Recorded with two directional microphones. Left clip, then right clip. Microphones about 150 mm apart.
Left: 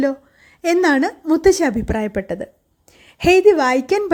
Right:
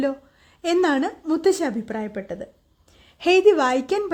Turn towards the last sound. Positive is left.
turn(degrees=20)  # may be behind; listen again after turning